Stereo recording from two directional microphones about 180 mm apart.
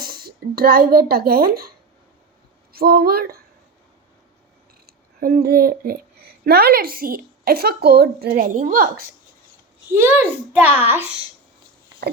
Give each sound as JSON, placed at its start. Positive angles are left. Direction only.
{"t": 0.0, "sound": "speech", "side_deg": -55}
{"t": 2.7, "sound": "speech", "side_deg": -55}
{"t": 4.9, "sound": "speech", "side_deg": -55}
{"t": 9.9, "sound": "a child's voice", "side_deg": -10}